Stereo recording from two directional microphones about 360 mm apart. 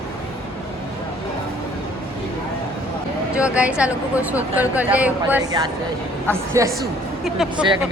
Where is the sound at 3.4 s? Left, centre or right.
Centre.